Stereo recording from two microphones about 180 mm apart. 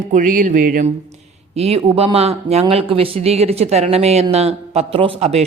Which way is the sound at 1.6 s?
35° right (ahead or behind).